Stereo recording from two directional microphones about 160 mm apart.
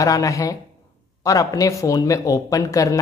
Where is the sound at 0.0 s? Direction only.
20° left (ahead or behind).